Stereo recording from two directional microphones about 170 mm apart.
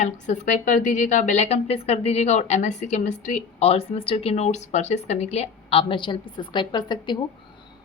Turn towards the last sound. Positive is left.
turn(degrees=25)  # may be behind; listen again after turning